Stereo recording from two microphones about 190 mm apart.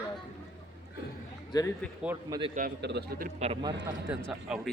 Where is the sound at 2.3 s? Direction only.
20° right (ahead or behind).